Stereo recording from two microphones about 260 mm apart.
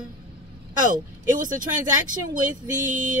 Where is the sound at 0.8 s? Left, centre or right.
Right.